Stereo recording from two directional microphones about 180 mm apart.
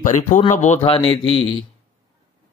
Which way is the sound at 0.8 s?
30° left (ahead or behind).